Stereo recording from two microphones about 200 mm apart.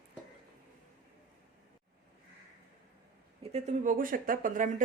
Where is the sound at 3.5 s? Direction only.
35° right (ahead or behind).